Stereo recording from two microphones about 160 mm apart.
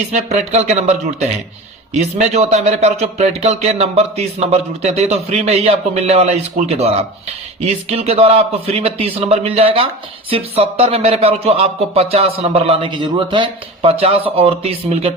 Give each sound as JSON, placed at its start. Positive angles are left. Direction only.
{"t": 0.1, "sound": "a man's voice", "side_deg": -45}